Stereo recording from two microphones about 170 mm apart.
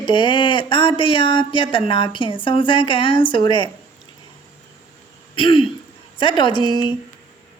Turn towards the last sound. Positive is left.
turn(degrees=25)  # may be behind; listen again after turning